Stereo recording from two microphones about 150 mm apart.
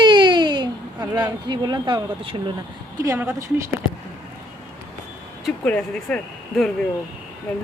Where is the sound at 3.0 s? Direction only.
20° right (ahead or behind).